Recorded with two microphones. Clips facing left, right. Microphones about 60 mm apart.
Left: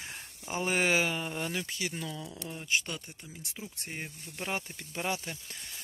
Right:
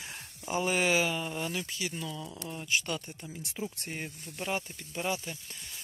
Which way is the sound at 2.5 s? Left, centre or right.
Left.